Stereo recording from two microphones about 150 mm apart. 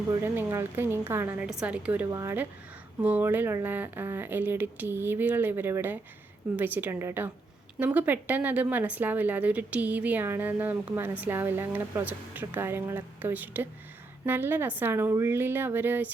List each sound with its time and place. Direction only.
0.1 s speech: 15° right (ahead or behind)